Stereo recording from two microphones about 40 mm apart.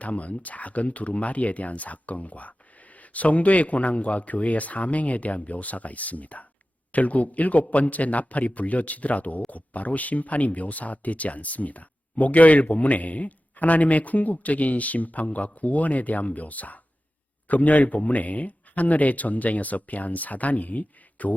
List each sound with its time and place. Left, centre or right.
0.0 s speech: left